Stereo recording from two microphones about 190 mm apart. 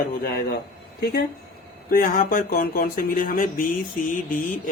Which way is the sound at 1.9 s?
45° left (ahead or behind).